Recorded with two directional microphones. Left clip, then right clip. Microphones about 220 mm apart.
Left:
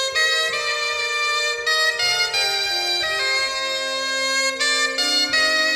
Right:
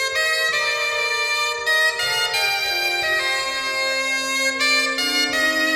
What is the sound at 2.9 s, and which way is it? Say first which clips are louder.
Bagpipes: right 1 dB; 20° right (ahead or behind).